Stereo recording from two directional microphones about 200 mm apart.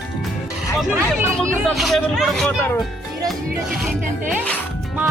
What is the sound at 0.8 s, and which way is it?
Speech, 10° right (ahead or behind).